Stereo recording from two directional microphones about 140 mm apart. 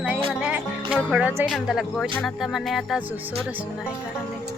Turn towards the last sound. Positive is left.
turn(degrees=0)  # may be behind; listen again after turning